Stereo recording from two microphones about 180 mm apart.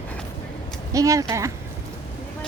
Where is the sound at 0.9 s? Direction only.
20° right (ahead or behind).